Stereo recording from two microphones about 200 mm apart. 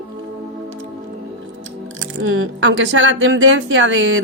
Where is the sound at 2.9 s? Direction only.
80° right.